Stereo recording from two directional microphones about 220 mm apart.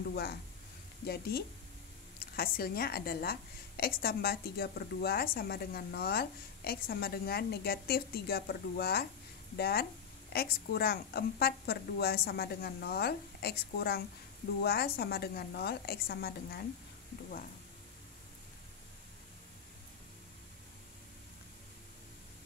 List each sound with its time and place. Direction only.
0.1 s a woman's voice: 45° left (ahead or behind)